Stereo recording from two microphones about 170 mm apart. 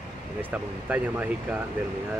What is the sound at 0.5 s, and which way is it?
Speech, 10° right (ahead or behind).